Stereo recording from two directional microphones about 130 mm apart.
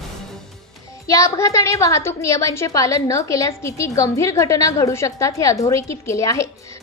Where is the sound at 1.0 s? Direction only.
25° left (ahead or behind).